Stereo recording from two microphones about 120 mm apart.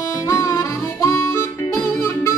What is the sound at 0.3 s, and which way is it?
Harmonica, 25° left (ahead or behind).